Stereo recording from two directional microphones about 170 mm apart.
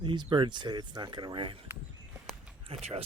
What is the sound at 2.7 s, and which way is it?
Speech, 35° right (ahead or behind).